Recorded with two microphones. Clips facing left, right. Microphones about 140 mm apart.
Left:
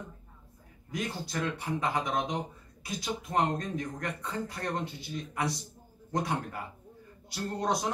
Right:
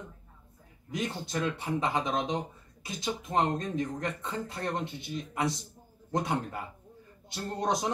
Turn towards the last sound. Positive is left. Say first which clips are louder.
# even
turn(degrees=-20)  # may be behind; listen again after turning